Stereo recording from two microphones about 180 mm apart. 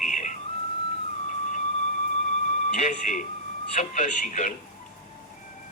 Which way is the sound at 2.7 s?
45° left (ahead or behind).